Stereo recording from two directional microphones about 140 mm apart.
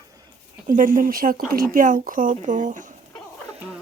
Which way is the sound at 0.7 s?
75° right (ahead or behind).